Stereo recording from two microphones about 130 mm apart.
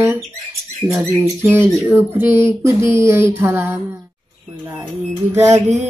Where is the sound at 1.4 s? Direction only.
20° right (ahead or behind).